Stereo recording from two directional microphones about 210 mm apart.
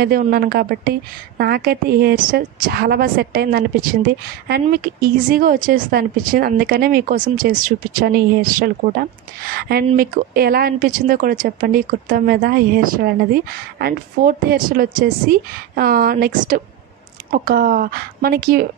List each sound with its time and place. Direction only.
0.0 s speech: 45° right (ahead or behind)